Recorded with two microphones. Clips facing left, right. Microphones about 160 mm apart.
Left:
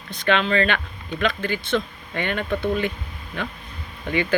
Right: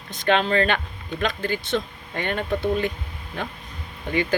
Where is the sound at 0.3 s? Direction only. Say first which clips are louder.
Even; 40° right (ahead or behind).